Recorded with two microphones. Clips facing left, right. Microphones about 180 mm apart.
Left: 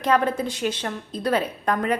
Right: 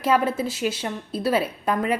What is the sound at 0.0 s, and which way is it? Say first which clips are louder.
A woman's voice: even; 5° right (ahead or behind).